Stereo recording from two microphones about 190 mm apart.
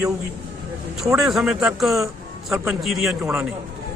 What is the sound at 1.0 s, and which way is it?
A man's voice, centre (ahead or behind).